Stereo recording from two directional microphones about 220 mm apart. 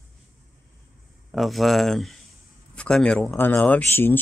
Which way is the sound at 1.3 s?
Centre (ahead or behind).